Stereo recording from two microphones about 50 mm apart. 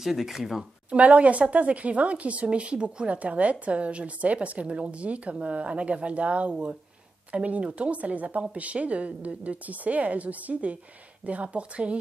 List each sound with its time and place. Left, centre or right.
0.0 s speech: centre
0.8 s a woman's voice: right